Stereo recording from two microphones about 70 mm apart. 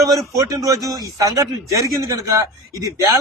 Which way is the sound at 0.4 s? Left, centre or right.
Right.